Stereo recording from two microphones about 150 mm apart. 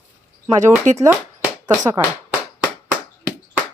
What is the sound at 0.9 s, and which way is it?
Speech, 55° right (ahead or behind).